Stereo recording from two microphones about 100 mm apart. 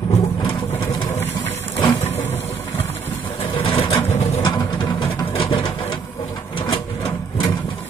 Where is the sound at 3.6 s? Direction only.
65° left (ahead or behind).